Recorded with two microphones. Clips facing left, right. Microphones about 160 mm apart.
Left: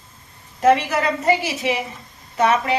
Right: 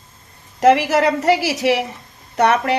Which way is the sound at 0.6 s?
85° right.